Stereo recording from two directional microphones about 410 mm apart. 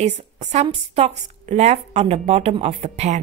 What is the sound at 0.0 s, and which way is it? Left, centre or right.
A woman's voice, centre.